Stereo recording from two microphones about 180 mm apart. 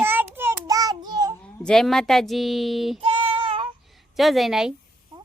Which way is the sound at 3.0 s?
25° right (ahead or behind).